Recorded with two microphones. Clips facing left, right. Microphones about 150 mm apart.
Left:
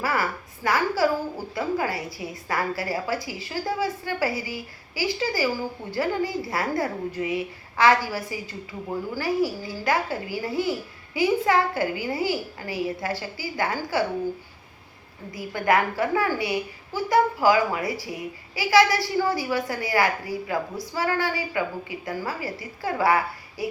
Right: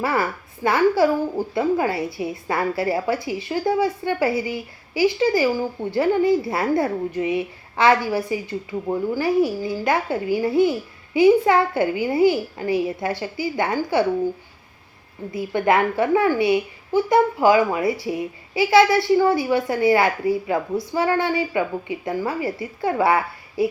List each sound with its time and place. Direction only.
0.0 s a woman's voice: 25° right (ahead or behind)
15.3 s a woman's voice: 25° right (ahead or behind)